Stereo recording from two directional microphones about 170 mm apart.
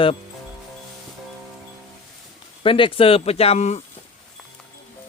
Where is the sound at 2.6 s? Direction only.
30° left (ahead or behind).